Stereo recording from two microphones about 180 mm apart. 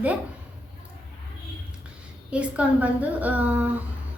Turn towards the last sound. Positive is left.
turn(degrees=-10)  # may be behind; listen again after turning